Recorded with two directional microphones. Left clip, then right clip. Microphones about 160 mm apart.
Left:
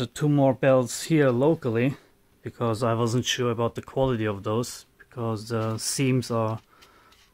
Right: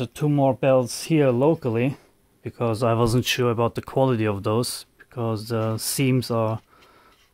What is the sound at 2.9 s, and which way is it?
Speech, 30° right (ahead or behind).